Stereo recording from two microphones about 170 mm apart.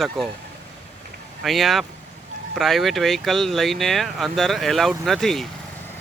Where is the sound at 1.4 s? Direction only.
Centre (ahead or behind).